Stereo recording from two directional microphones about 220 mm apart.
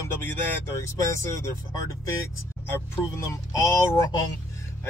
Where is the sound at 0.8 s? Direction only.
15° left (ahead or behind).